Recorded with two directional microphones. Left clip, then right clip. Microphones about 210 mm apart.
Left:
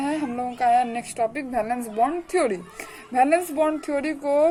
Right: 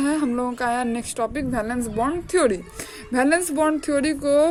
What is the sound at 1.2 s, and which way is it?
Speech, 30° right (ahead or behind).